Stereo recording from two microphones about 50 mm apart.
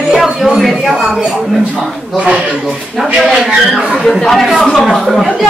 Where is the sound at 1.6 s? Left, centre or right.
Right.